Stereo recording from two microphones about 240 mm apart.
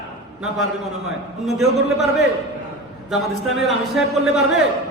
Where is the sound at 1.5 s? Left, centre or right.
Centre.